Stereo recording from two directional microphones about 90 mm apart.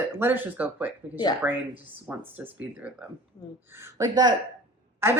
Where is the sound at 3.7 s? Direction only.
30° right (ahead or behind).